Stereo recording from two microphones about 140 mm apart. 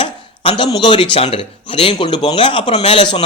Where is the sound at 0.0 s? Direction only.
35° left (ahead or behind).